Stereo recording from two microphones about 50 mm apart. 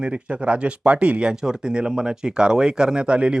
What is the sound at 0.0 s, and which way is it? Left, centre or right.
Speech, right.